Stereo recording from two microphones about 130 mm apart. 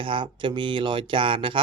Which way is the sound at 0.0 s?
40° right (ahead or behind).